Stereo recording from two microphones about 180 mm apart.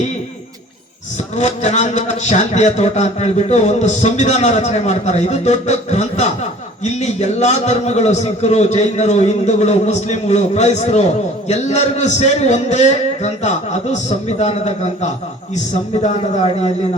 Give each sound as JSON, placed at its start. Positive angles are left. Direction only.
{"t": 1.4, "sound": "a man's voice", "side_deg": 40}